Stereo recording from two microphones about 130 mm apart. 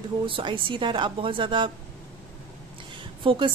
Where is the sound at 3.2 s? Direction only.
40° right (ahead or behind).